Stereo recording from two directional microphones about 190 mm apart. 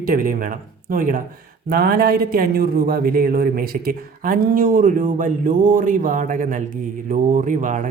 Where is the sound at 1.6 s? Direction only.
55° right (ahead or behind).